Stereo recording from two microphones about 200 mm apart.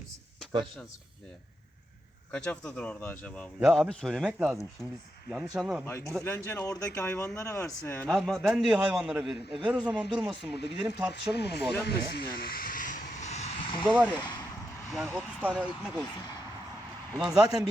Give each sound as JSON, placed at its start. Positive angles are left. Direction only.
{"t": 2.3, "sound": "speech", "side_deg": 5}
{"t": 5.8, "sound": "speech", "side_deg": 10}
{"t": 11.1, "sound": "speech", "side_deg": 55}
{"t": 14.9, "sound": "speech", "side_deg": -5}
{"t": 17.2, "sound": "speech", "side_deg": -5}